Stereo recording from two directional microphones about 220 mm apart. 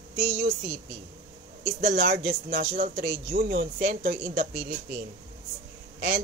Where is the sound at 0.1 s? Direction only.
10° right (ahead or behind).